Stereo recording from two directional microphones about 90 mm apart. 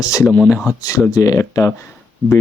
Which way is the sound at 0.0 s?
40° left (ahead or behind).